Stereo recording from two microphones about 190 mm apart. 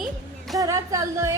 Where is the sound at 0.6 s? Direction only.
15° right (ahead or behind).